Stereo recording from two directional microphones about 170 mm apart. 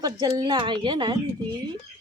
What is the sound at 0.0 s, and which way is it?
Speech, 20° right (ahead or behind).